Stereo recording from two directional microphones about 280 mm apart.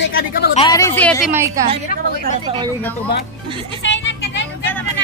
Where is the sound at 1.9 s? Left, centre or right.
Left.